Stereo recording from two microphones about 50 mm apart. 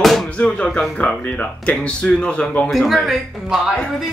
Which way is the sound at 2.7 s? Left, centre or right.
Centre.